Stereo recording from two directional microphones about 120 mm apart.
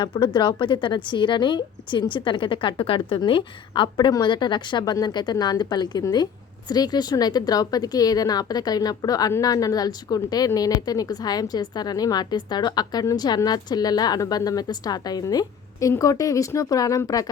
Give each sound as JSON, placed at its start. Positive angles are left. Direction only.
{"t": 0.0, "sound": "a woman's voice", "side_deg": 40}